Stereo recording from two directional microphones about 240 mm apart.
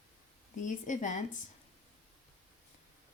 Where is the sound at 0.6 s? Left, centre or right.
Left.